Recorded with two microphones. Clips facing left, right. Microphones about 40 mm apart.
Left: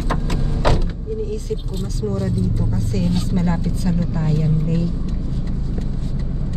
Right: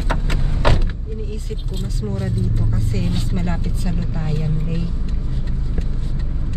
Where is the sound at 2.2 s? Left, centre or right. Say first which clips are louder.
Left 1 dB; right.